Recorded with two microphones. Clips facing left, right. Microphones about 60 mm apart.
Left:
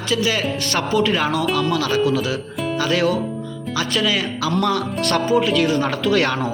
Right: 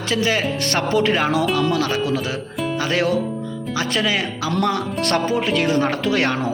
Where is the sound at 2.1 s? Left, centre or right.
Right.